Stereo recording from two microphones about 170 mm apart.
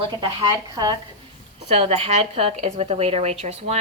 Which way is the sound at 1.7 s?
35° right (ahead or behind).